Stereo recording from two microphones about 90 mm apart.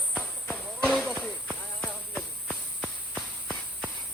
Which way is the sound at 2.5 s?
10° left (ahead or behind).